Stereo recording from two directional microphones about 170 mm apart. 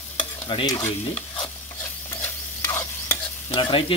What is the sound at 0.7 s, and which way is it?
Stir, 15° left (ahead or behind).